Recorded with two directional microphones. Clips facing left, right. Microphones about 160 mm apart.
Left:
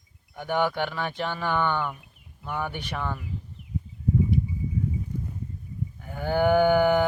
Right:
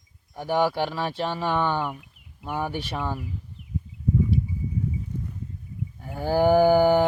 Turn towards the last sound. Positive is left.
turn(degrees=-30)  # may be behind; listen again after turning